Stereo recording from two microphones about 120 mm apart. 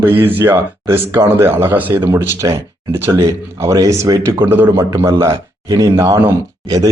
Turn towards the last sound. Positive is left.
turn(degrees=-30)  # may be behind; listen again after turning